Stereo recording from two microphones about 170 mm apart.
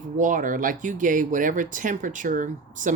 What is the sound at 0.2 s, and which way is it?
Speech, 50° right (ahead or behind).